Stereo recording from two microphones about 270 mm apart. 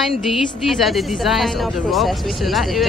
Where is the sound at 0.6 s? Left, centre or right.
Centre.